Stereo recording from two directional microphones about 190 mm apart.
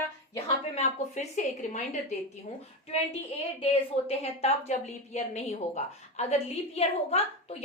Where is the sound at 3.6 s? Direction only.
30° left (ahead or behind).